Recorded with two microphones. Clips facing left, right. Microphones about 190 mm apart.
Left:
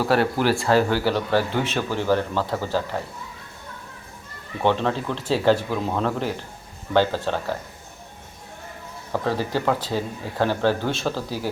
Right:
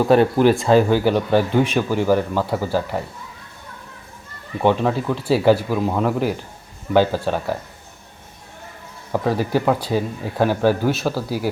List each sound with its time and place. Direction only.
0.0 s speech: 20° right (ahead or behind)
4.6 s speech: 10° right (ahead or behind)
9.1 s speech: 15° right (ahead or behind)